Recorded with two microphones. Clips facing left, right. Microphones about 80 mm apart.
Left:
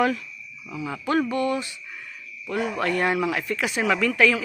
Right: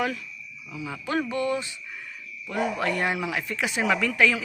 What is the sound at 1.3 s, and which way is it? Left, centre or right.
Speech, centre.